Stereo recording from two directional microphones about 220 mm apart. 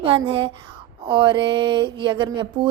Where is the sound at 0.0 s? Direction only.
25° right (ahead or behind).